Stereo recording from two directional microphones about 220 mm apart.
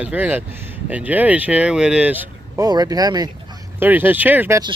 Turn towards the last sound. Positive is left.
turn(degrees=-15)  # may be behind; listen again after turning